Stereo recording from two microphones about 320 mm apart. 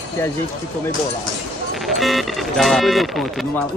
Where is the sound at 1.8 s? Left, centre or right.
Centre.